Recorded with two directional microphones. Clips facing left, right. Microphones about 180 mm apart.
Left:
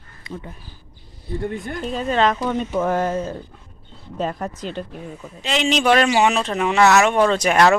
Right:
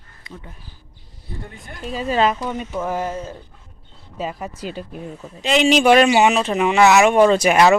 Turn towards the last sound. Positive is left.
turn(degrees=-5)  # may be behind; listen again after turning